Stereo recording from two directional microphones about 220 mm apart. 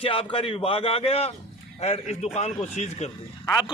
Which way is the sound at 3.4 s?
15° left (ahead or behind).